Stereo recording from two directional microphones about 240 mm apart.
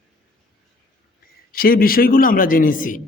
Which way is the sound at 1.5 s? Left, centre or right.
Left.